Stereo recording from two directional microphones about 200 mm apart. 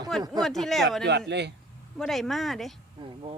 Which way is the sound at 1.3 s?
60° right (ahead or behind).